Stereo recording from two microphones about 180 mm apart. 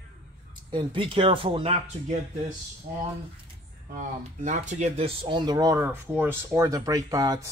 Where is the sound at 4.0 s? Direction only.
45° right (ahead or behind).